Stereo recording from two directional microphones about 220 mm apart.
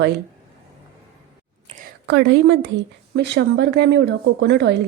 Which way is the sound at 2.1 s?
55° right (ahead or behind).